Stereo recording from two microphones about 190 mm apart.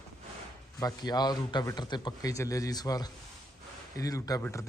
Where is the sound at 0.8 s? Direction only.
20° left (ahead or behind).